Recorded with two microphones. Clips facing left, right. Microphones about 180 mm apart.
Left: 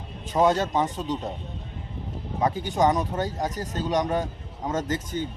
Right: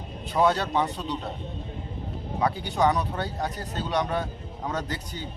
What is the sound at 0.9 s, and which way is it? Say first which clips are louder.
Speech: left 3 dB; 45° left (ahead or behind).